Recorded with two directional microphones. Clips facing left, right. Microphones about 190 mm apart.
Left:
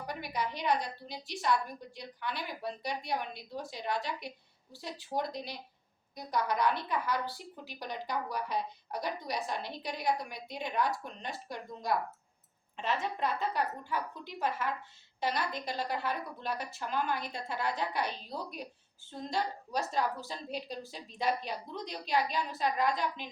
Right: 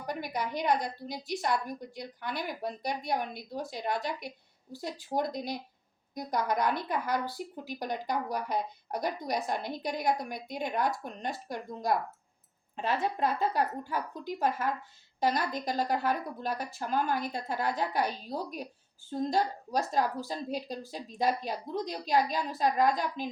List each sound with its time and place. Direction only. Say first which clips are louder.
0.1 s a woman's voice: right 4 dB; 45° right (ahead or behind)